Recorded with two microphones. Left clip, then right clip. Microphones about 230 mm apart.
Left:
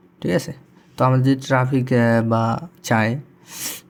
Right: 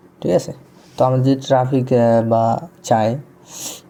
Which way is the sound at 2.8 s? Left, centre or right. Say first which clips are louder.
Right 3 dB; left.